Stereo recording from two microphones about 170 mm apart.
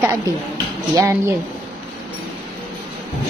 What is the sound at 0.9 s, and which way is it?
Speech, 15° right (ahead or behind).